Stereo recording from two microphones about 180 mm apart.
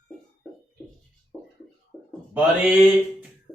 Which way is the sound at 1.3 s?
Centre (ahead or behind).